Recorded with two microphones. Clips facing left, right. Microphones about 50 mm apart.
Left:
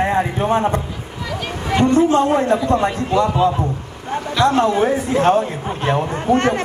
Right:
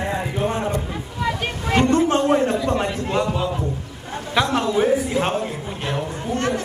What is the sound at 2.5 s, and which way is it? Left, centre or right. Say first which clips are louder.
Speech: left 5 dB; left.